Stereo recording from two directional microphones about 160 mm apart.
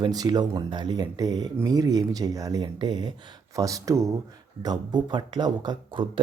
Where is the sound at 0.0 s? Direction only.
25° right (ahead or behind).